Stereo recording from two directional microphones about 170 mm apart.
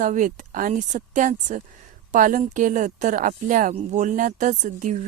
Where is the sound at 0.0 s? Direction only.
50° right (ahead or behind).